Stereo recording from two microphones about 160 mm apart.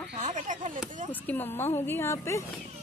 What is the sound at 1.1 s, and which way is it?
A child's voice, 10° left (ahead or behind).